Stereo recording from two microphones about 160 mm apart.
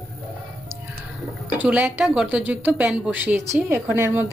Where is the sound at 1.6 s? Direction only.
10° right (ahead or behind).